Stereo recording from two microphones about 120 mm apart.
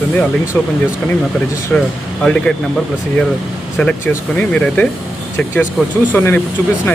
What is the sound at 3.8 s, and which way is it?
Speech, 10° left (ahead or behind).